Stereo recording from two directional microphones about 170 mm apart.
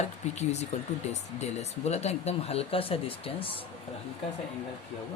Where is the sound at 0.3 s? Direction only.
40° left (ahead or behind).